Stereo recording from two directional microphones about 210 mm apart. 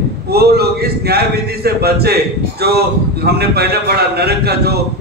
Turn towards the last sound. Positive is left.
turn(degrees=-50)  # may be behind; listen again after turning